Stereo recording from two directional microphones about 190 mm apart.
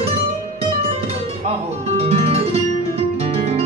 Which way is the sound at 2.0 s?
35° right (ahead or behind).